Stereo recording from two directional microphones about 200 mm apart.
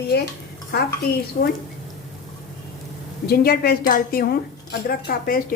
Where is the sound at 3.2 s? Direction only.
50° left (ahead or behind).